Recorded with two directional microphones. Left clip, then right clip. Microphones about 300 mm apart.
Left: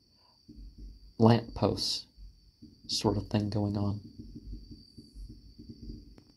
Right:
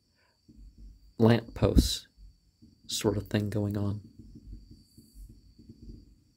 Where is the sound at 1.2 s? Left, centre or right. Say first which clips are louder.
Even; centre.